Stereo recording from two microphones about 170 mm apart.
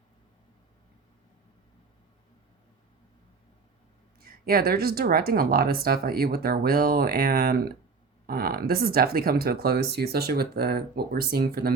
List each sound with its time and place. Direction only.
4.2 s speech: 65° right (ahead or behind)